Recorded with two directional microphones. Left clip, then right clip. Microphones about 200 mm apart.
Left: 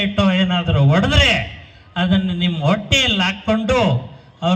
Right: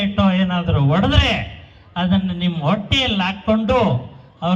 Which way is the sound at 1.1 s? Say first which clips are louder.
Left 4 dB; 50° right (ahead or behind).